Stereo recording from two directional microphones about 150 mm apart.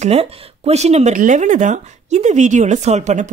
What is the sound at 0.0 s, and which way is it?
Speech, 45° right (ahead or behind).